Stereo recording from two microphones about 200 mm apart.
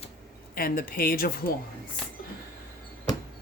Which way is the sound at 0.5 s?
45° left (ahead or behind).